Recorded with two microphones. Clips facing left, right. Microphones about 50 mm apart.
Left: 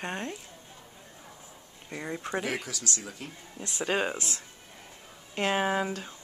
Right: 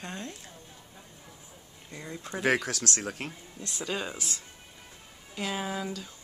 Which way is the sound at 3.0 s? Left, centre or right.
Right.